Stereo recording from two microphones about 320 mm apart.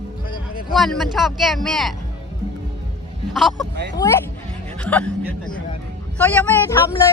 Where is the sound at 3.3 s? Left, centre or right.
Centre.